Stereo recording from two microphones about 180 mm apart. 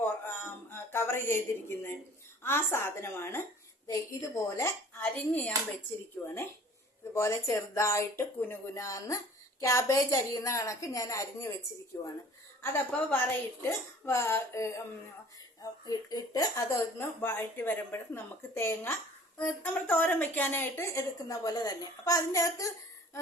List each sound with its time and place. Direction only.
0.0 s a sound: 10° left (ahead or behind)
2.4 s speech: 15° left (ahead or behind)
7.1 s speech: 15° left (ahead or behind)
12.7 s speech: 10° left (ahead or behind)
15.9 s speech: 20° left (ahead or behind)